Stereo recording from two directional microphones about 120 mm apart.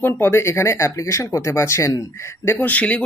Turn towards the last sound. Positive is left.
turn(degrees=10)  # may be behind; listen again after turning